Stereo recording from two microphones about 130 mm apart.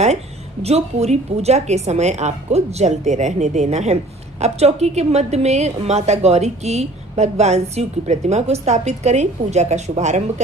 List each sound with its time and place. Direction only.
0.6 s a woman's voice: 55° right (ahead or behind)